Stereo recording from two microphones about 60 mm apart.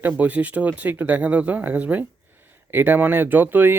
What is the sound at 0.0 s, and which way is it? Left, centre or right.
Speech, right.